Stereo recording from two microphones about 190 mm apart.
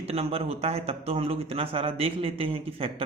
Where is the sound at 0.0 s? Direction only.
30° right (ahead or behind).